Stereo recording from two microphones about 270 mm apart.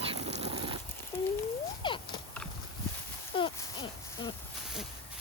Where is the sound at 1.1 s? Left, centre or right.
Centre.